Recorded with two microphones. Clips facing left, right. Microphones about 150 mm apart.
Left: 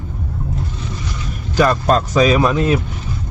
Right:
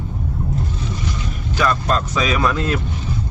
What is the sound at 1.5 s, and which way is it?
Speech, 40° left (ahead or behind).